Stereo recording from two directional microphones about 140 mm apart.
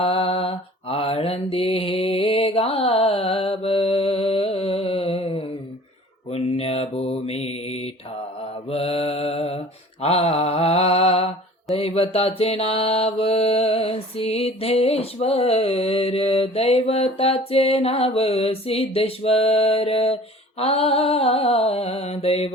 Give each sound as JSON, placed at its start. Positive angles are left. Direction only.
{"t": 0.0, "sound": "mantra", "side_deg": 45}